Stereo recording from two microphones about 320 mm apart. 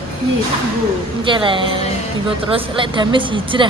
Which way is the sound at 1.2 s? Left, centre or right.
Centre.